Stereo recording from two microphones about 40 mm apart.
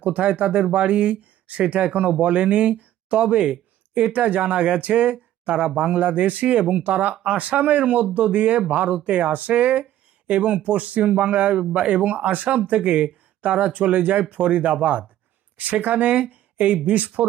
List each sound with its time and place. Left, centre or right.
0.0 s a man's voice: right